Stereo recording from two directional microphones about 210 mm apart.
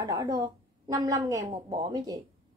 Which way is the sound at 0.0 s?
15° right (ahead or behind).